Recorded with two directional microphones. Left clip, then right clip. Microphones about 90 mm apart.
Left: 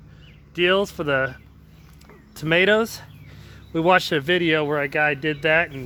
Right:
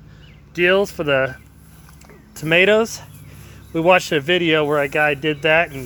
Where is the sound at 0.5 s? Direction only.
5° left (ahead or behind).